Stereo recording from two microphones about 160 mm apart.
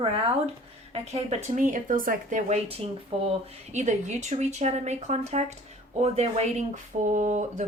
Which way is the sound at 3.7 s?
45° right (ahead or behind).